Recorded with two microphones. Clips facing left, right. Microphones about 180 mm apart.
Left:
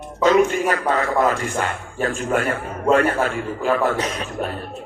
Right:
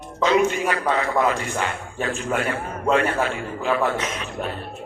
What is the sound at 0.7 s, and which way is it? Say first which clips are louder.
A man's voice: left 2 dB; 45° left (ahead or behind).